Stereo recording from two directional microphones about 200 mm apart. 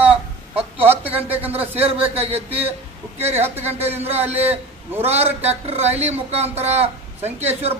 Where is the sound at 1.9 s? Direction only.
30° right (ahead or behind).